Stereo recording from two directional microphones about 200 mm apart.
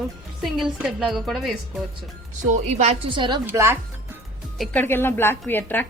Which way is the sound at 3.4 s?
10° right (ahead or behind).